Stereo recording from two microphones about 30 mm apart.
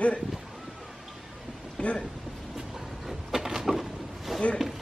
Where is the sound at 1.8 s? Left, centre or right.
Left.